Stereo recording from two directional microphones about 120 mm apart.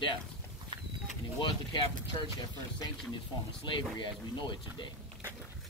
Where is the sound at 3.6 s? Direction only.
40° left (ahead or behind).